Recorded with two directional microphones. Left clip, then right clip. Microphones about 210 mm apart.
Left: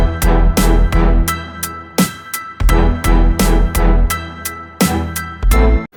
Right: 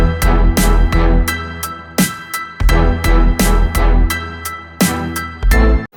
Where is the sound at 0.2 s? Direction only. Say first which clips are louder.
Left 1 dB; centre (ahead or behind).